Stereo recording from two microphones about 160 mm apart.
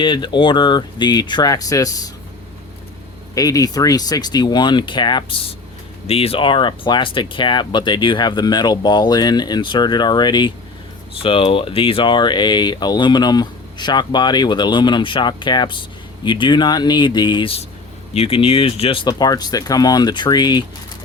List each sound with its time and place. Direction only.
0.0 s speech: 30° left (ahead or behind)
3.3 s speech: 20° left (ahead or behind)
19.0 s speech: 25° left (ahead or behind)